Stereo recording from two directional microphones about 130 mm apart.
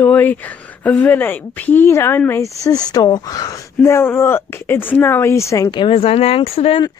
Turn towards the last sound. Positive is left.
turn(degrees=50)  # may be behind; listen again after turning